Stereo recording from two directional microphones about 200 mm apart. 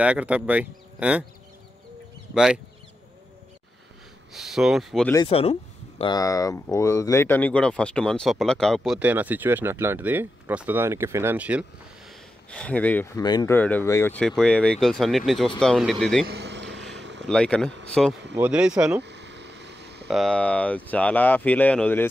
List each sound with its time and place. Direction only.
0.0 s speech: 5° right (ahead or behind)
2.3 s speech: 5° right (ahead or behind)
4.3 s speech: centre (ahead or behind)
5.1 s speech: 25° left (ahead or behind); by 11.6 s 5° right (ahead or behind)
12.4 s speech: 5° left (ahead or behind)
13.6 s speech: 10° left (ahead or behind)
16.3 s vehicle: 60° right (ahead or behind)
17.3 s speech: 5° left (ahead or behind)
19.0 s boat: 60° right (ahead or behind)
20.1 s speech: centre (ahead or behind)